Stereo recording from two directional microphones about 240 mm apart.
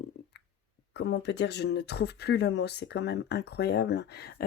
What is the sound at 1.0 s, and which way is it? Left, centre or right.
Speech, left.